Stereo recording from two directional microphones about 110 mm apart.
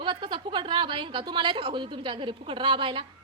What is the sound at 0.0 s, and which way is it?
A woman's voice, 45° right (ahead or behind).